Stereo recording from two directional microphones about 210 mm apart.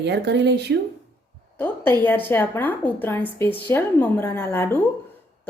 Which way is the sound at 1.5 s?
10° left (ahead or behind).